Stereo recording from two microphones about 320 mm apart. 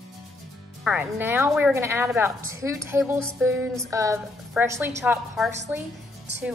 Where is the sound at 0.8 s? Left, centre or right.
Centre.